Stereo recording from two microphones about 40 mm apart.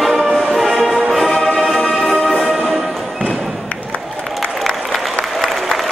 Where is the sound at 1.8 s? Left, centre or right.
Centre.